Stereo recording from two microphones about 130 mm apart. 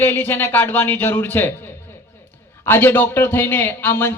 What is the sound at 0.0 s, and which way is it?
Speech, 15° left (ahead or behind).